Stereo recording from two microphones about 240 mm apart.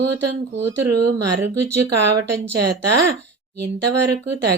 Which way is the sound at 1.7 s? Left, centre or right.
Right.